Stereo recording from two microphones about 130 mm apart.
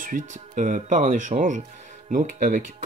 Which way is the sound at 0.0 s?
85° right.